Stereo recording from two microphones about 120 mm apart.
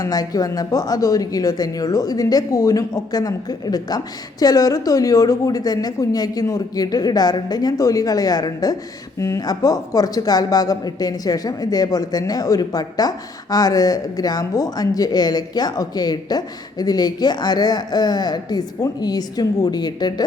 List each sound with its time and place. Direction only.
0.0 s speech: 30° left (ahead or behind)